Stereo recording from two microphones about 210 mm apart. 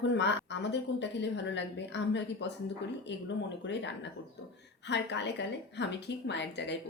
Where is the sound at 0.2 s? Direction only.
55° left (ahead or behind).